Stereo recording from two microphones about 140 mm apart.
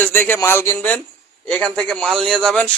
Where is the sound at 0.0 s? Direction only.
15° left (ahead or behind).